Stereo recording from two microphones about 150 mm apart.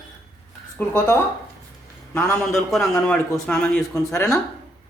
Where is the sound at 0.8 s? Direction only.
15° left (ahead or behind).